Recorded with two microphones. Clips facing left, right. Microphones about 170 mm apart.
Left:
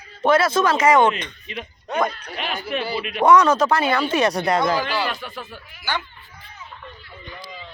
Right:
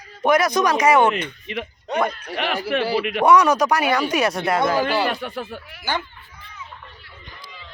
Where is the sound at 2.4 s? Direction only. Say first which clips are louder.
Right 4 dB; 75° right (ahead or behind).